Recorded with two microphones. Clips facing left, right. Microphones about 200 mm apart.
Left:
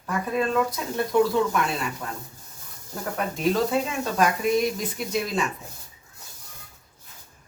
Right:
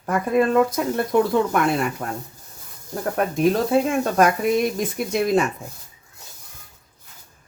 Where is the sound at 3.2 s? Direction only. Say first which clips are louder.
Right 4 dB; 50° right (ahead or behind).